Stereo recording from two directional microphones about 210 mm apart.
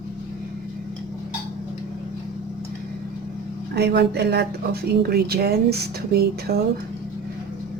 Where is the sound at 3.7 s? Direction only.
55° right (ahead or behind).